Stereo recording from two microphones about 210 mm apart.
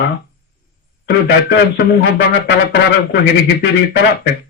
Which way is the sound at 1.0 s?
50° left (ahead or behind).